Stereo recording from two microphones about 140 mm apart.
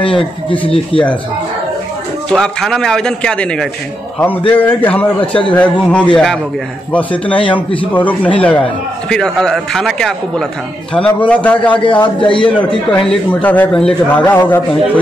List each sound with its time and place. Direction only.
0.0 s speech: 35° left (ahead or behind)
2.3 s a man's voice: 5° left (ahead or behind)
11.8 s speech: 35° left (ahead or behind)
12.5 s a man's voice: 5° left (ahead or behind)